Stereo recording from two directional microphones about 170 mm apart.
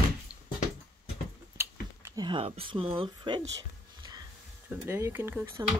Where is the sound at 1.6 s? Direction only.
15° right (ahead or behind).